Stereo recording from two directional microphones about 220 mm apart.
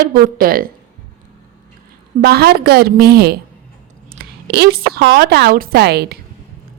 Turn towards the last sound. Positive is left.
turn(degrees=-45)  # may be behind; listen again after turning